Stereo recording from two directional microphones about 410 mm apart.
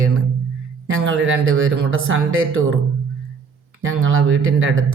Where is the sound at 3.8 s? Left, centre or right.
Right.